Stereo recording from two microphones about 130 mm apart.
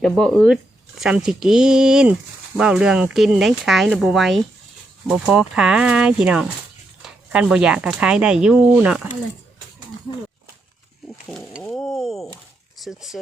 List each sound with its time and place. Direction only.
0.3 s speech: centre (ahead or behind)
11.3 s a sound: centre (ahead or behind)
12.8 s speech: centre (ahead or behind)